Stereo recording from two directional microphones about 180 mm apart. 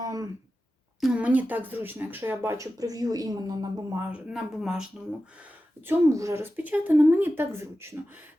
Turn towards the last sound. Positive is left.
turn(degrees=-15)  # may be behind; listen again after turning